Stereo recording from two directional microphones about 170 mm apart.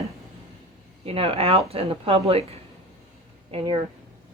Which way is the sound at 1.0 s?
35° right (ahead or behind).